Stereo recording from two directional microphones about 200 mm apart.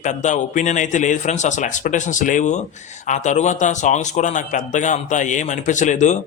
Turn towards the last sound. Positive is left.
turn(degrees=35)  # may be behind; listen again after turning